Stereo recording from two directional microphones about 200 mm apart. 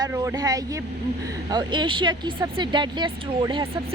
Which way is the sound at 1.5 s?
20° right (ahead or behind).